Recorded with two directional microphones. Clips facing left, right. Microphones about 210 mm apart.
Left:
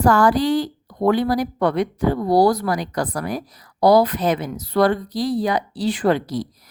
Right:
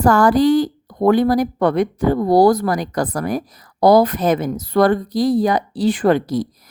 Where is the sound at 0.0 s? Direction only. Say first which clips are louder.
Right 3 dB; 45° right (ahead or behind).